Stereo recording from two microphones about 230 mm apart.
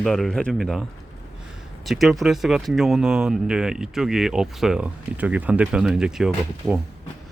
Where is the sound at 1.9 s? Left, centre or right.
Centre.